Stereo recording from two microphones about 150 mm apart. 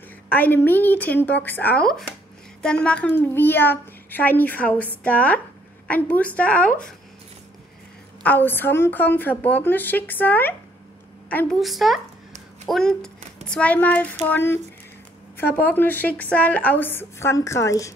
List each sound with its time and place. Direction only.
0.3 s a woman's voice: 10° left (ahead or behind)
8.2 s a woman's voice: 10° left (ahead or behind)
11.6 s a child's voice: centre (ahead or behind); by 17.9 s 20° left (ahead or behind)